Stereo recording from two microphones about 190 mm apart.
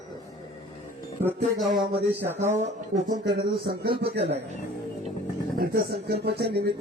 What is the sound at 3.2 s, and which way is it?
Speech, 60° right (ahead or behind).